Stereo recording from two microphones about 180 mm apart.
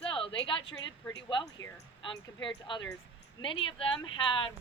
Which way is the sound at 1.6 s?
90° left.